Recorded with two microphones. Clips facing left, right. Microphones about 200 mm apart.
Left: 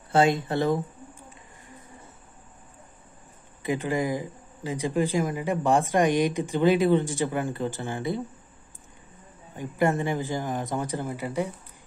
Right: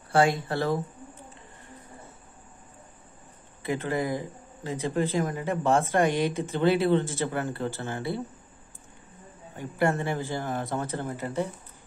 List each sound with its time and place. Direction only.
0.1 s speech: 20° left (ahead or behind)
3.6 s speech: 15° left (ahead or behind)
9.6 s speech: 15° left (ahead or behind)